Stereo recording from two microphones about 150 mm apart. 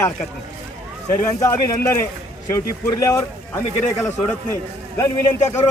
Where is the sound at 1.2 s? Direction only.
20° left (ahead or behind).